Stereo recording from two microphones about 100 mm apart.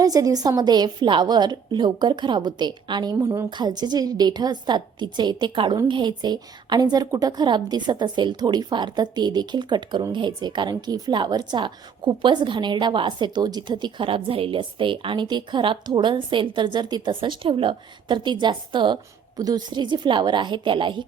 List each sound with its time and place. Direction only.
0.0 s a woman's voice: 35° right (ahead or behind); by 21.0 s 55° right (ahead or behind)